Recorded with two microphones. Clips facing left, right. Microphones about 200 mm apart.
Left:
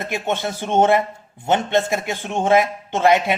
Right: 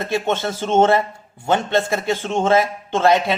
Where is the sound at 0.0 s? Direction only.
15° left (ahead or behind).